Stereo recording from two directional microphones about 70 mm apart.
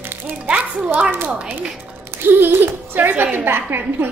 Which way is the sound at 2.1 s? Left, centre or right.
Right.